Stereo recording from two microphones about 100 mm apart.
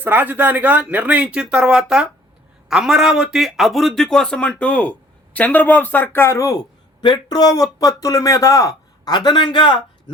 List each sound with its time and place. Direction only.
0.0 s a man's voice: 20° right (ahead or behind); by 6.6 s 30° left (ahead or behind)
7.0 s speech: 50° left (ahead or behind)
9.1 s a man's voice: 50° left (ahead or behind)